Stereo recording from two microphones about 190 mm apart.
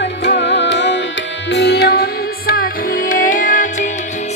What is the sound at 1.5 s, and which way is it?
Music, 60° left (ahead or behind).